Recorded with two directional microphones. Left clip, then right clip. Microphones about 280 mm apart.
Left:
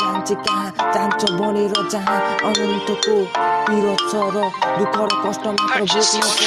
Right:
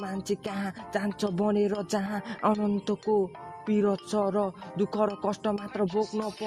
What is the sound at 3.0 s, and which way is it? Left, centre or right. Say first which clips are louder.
Speech: left 12 dB; left.